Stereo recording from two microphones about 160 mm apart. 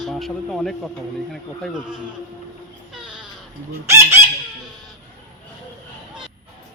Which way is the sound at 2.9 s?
5° right (ahead or behind).